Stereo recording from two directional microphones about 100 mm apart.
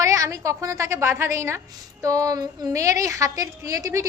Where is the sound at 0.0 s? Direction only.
30° right (ahead or behind).